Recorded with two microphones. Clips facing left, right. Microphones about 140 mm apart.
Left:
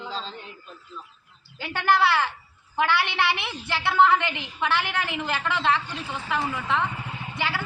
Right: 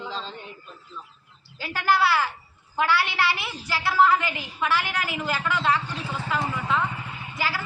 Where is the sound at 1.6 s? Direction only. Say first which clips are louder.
Left 1 dB; 20° left (ahead or behind).